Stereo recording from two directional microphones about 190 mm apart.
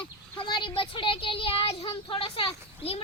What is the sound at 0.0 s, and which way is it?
Speech, 25° left (ahead or behind).